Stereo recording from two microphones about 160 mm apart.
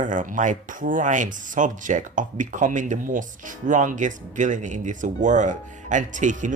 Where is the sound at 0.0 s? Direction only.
55° right (ahead or behind).